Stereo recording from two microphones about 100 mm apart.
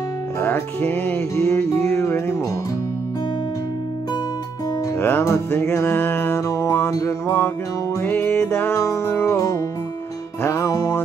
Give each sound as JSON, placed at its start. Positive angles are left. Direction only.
{"t": 0.4, "sound": "music", "side_deg": 20}
{"t": 4.9, "sound": "music", "side_deg": 25}
{"t": 7.2, "sound": "music", "side_deg": 20}